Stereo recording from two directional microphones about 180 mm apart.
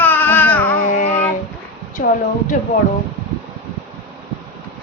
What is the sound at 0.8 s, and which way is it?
Child singing, 45° left (ahead or behind).